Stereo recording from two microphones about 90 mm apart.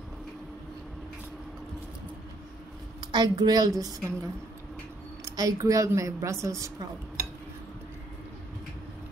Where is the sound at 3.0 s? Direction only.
55° right (ahead or behind); by 6.5 s 35° right (ahead or behind).